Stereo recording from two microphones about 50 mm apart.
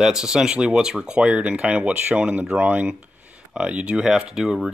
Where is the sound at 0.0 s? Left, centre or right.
Centre.